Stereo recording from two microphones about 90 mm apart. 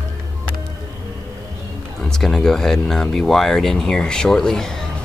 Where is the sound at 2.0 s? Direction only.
5° left (ahead or behind).